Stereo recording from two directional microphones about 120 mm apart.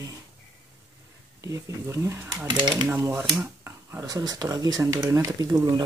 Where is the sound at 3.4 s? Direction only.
20° right (ahead or behind).